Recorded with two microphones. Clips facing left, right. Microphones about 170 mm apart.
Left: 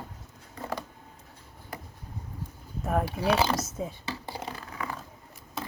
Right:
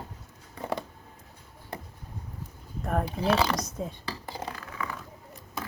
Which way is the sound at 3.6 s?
5° left (ahead or behind).